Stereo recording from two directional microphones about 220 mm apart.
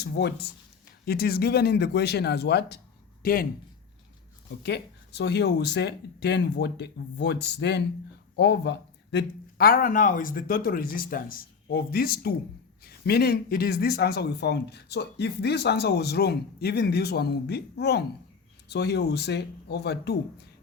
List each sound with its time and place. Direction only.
0.0 s a man's voice: 50° left (ahead or behind)
4.6 s a man's voice: 50° left (ahead or behind)